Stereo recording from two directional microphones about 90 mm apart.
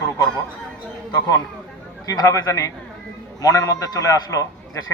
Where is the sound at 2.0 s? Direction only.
40° left (ahead or behind).